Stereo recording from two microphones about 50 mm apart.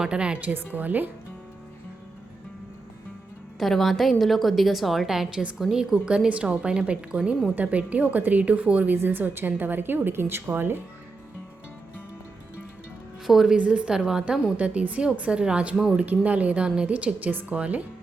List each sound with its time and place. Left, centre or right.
0.0 s a woman's voice: centre
0.4 s a woman's voice: right
3.6 s a woman's voice: centre
7.5 s a woman's voice: right
9.0 s a woman's voice: right
13.2 s a woman's voice: centre
13.6 s a woman's voice: centre
14.5 s a woman's voice: right
17.2 s a woman's voice: right